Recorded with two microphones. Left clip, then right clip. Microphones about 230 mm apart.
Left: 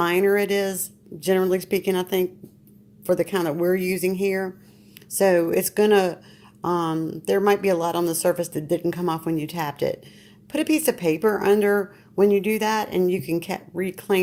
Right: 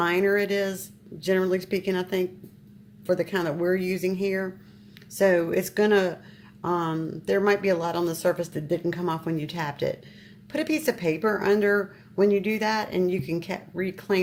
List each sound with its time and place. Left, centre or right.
0.0 s speech: left